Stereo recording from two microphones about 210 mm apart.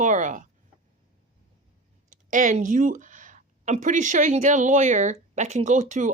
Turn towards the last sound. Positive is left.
turn(degrees=-35)  # may be behind; listen again after turning